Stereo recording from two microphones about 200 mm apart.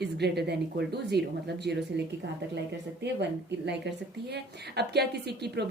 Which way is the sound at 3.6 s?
60° right (ahead or behind).